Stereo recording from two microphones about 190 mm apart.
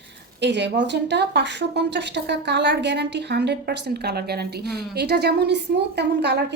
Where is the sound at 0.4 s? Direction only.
65° right (ahead or behind).